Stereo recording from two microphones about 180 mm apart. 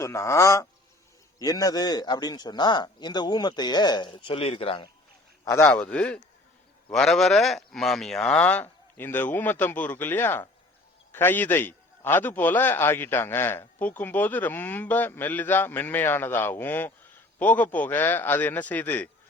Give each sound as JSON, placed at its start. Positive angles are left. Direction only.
{"t": 0.0, "sound": "a man's voice", "side_deg": 15}
{"t": 5.5, "sound": "a man's voice", "side_deg": 15}